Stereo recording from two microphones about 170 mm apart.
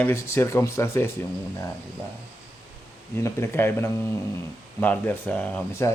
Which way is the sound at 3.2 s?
15° left (ahead or behind).